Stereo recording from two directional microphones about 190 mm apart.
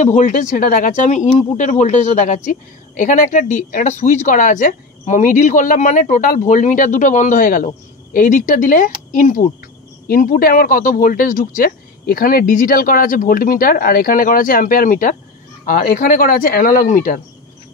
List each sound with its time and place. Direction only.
0.0 s speech: 40° left (ahead or behind)